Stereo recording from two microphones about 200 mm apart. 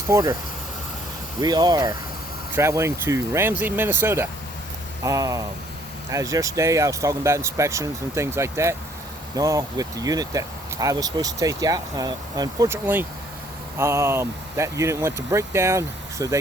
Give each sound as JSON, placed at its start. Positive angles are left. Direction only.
{"t": 0.1, "sound": "speech", "side_deg": -15}
{"t": 1.4, "sound": "speech", "side_deg": -20}